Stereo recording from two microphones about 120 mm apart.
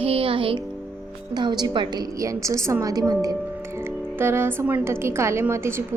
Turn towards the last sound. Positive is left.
turn(degrees=-20)  # may be behind; listen again after turning